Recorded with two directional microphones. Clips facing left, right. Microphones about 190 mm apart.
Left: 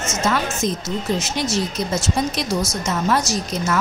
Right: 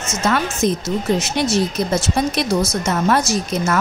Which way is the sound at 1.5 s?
60° right (ahead or behind).